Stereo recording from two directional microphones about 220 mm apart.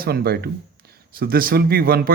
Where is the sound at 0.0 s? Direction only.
45° right (ahead or behind).